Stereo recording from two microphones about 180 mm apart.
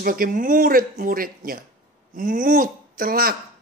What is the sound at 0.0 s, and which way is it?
Speech, 50° right (ahead or behind).